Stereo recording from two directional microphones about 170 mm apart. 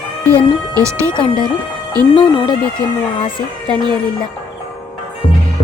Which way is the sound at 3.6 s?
25° right (ahead or behind).